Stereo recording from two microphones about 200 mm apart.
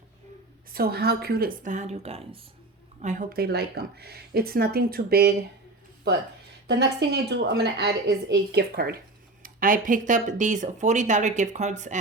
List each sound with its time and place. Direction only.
0.7 s speech: 50° right (ahead or behind); by 2.4 s 30° right (ahead or behind)
3.0 s speech: 40° right (ahead or behind)
6.7 s speech: 55° right (ahead or behind); by 11.9 s 35° right (ahead or behind)